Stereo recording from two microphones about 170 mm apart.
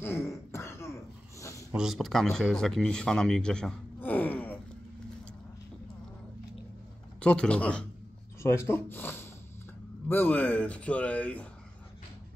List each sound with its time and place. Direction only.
0.0 s throat clearing: 15° left (ahead or behind)
1.7 s speech: 5° right (ahead or behind)
7.2 s a man's voice: 5° left (ahead or behind)